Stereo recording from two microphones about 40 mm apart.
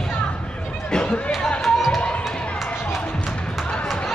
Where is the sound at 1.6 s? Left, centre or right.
Centre.